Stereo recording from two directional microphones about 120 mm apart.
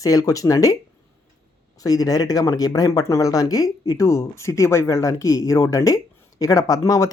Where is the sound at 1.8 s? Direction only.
30° left (ahead or behind).